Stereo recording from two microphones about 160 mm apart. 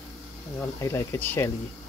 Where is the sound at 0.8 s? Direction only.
20° left (ahead or behind).